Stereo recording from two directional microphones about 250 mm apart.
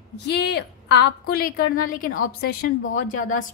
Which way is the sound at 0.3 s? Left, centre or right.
Left.